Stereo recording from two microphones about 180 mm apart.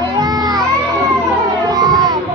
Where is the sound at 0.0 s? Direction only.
20° right (ahead or behind).